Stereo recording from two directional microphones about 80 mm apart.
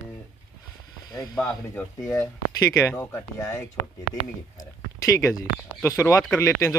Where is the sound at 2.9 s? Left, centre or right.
Left.